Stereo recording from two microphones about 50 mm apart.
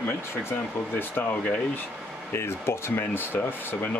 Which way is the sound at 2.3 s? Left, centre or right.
Left.